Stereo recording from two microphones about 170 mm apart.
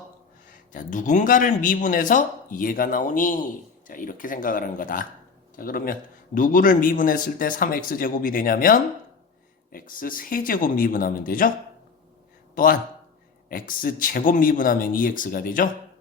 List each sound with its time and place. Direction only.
0.5 s a man's voice: 50° left (ahead or behind)
12.6 s a man's voice: 55° left (ahead or behind)